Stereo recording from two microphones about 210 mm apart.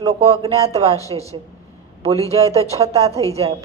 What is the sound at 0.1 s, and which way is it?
Speech, 30° right (ahead or behind).